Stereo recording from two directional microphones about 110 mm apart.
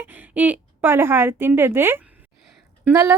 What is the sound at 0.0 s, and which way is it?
A woman's voice, 15° right (ahead or behind).